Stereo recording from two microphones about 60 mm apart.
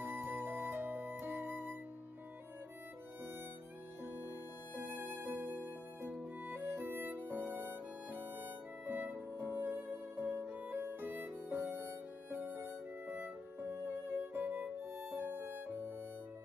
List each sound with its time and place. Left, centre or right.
0.0 s music: right
4.7 s music: right
10.8 s music: right